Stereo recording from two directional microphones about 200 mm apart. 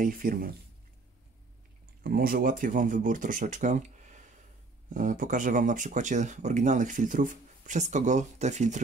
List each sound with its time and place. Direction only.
0.0 s speech: 45° right (ahead or behind)
2.0 s speech: 50° right (ahead or behind)